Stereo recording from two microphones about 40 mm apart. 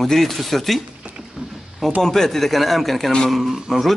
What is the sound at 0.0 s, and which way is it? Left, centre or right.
Speech, centre.